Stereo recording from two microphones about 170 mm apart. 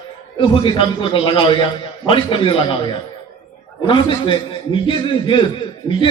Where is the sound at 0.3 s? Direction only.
30° left (ahead or behind).